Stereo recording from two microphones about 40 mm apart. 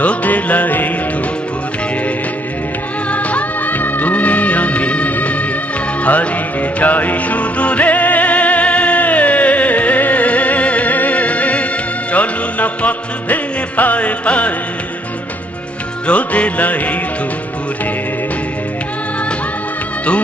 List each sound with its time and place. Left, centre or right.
0.0 s music: left
3.1 s music of bollywood: left
5.1 s music: left
16.1 s music: left